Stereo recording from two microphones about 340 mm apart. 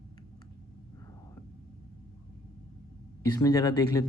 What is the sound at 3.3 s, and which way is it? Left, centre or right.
Speech, centre.